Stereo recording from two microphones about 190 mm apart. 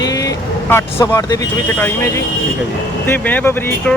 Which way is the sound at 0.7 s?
15° left (ahead or behind).